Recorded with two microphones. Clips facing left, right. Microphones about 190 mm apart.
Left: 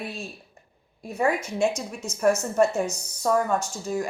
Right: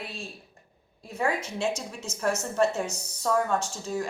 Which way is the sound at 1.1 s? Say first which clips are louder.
Left 5 dB; 10° left (ahead or behind).